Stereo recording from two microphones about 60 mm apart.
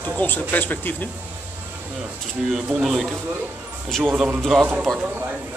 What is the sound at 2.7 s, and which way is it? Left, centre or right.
Speech, centre.